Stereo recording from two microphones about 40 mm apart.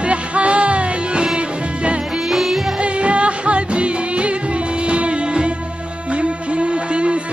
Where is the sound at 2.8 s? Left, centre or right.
Right.